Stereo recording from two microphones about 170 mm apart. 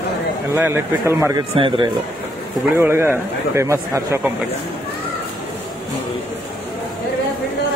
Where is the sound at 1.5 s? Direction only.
30° right (ahead or behind).